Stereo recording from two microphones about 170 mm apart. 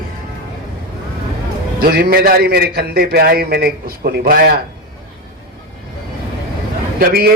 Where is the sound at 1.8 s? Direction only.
65° right (ahead or behind).